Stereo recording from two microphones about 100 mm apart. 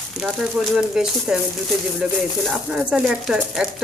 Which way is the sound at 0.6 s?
20° right (ahead or behind).